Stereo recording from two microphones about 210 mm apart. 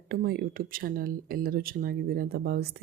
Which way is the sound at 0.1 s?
45° right (ahead or behind).